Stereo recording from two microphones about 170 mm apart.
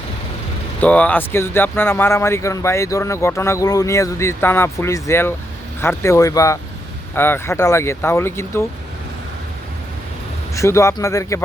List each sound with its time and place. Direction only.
0.8 s speech: 10° left (ahead or behind)
10.5 s speech: 15° left (ahead or behind)